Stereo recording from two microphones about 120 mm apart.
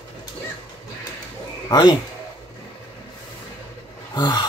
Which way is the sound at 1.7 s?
35° left (ahead or behind).